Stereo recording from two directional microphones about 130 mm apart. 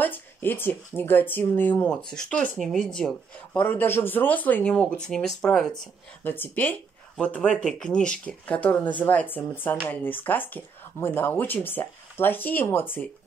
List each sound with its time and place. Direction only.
0.0 s speech: 15° left (ahead or behind)
6.2 s speech: 15° left (ahead or behind)